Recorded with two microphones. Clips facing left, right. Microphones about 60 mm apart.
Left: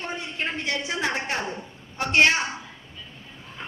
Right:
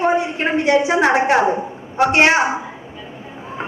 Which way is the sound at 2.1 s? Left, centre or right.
Right.